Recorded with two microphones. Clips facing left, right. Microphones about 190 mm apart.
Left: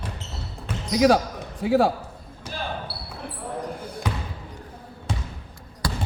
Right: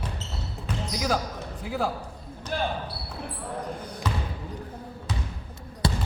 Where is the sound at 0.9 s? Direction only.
75° left (ahead or behind).